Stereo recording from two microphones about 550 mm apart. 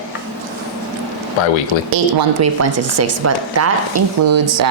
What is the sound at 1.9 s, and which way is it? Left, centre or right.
A woman's voice, right.